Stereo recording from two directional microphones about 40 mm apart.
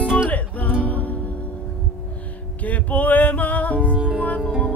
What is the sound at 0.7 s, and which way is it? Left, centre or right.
Music, left.